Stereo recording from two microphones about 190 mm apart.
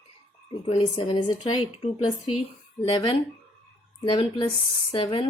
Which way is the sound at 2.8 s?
25° left (ahead or behind).